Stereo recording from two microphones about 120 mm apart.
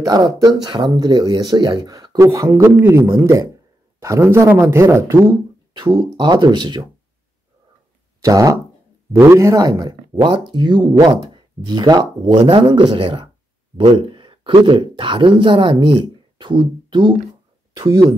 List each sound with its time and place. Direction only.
0.0 s speech: 35° right (ahead or behind)
8.2 s speech: 30° right (ahead or behind)
11.3 s a sound: 35° right (ahead or behind)
12.3 s speech: 50° right (ahead or behind)